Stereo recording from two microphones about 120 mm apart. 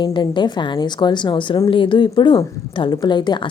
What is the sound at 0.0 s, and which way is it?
A woman's voice, 40° left (ahead or behind).